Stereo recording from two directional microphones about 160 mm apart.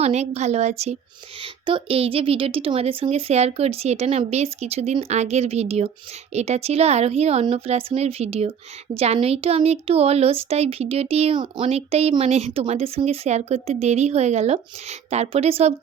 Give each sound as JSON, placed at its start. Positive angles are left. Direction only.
{"t": 0.0, "sound": "a woman's voice", "side_deg": -45}
{"t": 1.4, "sound": "speech", "side_deg": -35}